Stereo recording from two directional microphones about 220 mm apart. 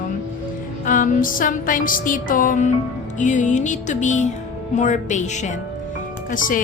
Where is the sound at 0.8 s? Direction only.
35° left (ahead or behind).